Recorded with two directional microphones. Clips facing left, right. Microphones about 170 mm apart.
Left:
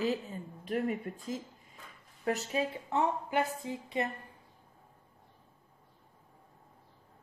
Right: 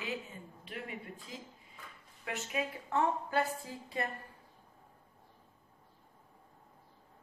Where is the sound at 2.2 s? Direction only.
35° left (ahead or behind).